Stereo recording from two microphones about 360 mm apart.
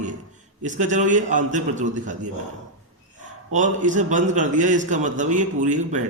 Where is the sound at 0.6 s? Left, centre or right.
Centre.